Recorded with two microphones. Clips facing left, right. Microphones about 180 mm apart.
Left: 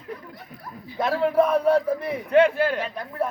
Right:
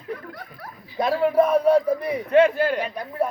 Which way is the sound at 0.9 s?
15° right (ahead or behind).